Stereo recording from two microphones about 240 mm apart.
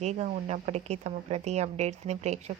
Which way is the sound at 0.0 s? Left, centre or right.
Right.